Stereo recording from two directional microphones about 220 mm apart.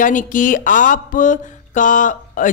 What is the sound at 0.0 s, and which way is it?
A woman's voice, 35° left (ahead or behind).